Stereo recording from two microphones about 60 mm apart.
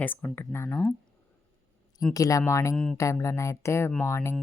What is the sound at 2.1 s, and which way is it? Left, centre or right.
Speech, left.